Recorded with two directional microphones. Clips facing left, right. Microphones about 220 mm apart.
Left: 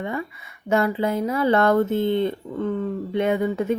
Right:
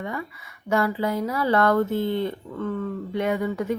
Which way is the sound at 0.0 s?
25° left (ahead or behind).